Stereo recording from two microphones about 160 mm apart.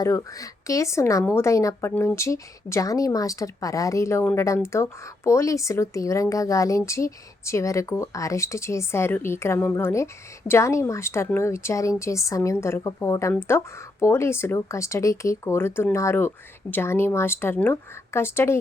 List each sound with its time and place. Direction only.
0.0 s speech: 20° left (ahead or behind)